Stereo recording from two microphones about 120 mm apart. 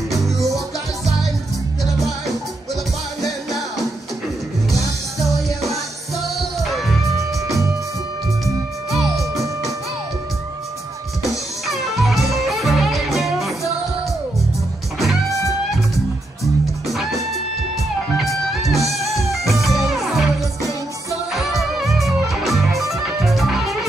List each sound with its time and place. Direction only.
2.0 s music: centre (ahead or behind)
5.6 s music: centre (ahead or behind)
7.4 s music: 25° right (ahead or behind)
9.1 s music: 25° right (ahead or behind)
11.2 s music: centre (ahead or behind)
15.0 s music: centre (ahead or behind)
16.8 s music: centre (ahead or behind)